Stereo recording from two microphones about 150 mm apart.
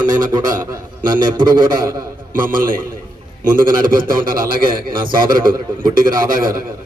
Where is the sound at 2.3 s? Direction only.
65° right (ahead or behind).